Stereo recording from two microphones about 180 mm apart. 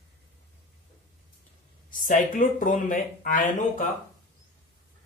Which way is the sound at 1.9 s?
45° left (ahead or behind).